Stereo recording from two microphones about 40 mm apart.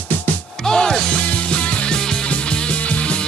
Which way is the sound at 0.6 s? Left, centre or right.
Centre.